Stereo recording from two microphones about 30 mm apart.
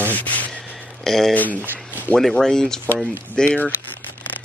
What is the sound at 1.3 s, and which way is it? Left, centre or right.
Speech, left.